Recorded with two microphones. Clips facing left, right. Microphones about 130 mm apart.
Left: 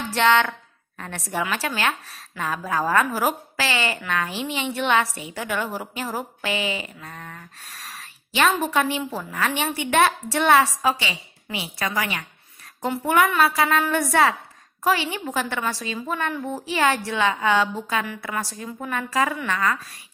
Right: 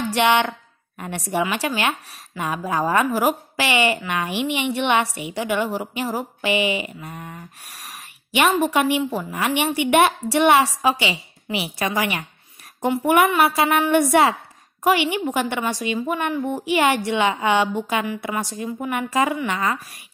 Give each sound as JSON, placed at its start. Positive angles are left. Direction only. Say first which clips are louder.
{"t": 0.1, "sound": "a woman's voice", "louder": "even", "side_deg": -15}
{"t": 3.1, "sound": "a woman's voice", "louder": "right 4 dB", "side_deg": -5}